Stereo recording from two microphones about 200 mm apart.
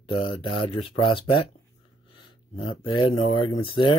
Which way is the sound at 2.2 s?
25° left (ahead or behind).